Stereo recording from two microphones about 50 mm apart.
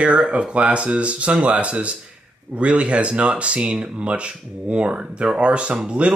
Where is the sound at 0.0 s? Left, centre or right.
Centre.